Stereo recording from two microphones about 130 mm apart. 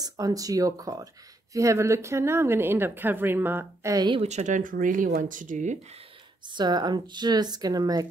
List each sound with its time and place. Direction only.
0.0 s a woman's voice: 25° right (ahead or behind)
3.9 s speech: 35° right (ahead or behind)
4.2 s speech: 60° right (ahead or behind)
6.4 s speech: 35° right (ahead or behind)